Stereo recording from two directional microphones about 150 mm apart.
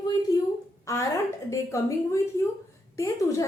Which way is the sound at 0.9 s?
20° left (ahead or behind).